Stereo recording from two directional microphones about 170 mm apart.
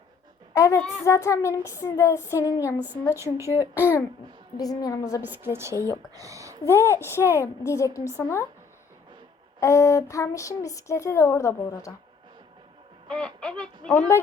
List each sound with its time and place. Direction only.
0.5 s speech: 15° left (ahead or behind)
3.3 s a woman's voice: 15° right (ahead or behind)
4.5 s a woman's voice: 20° left (ahead or behind)
5.2 s a woman's voice: 10° right (ahead or behind)
6.7 s speech: 15° left (ahead or behind)
9.6 s speech: 20° left (ahead or behind)
13.1 s speech: 5° left (ahead or behind)